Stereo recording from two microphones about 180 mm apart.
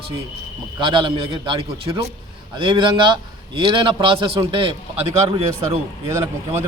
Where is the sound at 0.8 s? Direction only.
25° right (ahead or behind).